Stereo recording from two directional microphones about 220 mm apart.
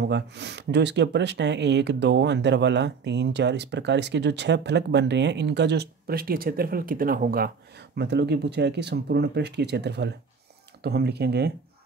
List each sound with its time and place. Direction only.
0.0 s speech: 50° right (ahead or behind)